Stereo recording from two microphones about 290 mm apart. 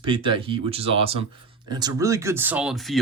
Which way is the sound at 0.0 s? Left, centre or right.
Centre.